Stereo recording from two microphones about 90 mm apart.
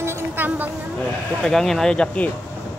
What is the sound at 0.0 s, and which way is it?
Music, 30° right (ahead or behind).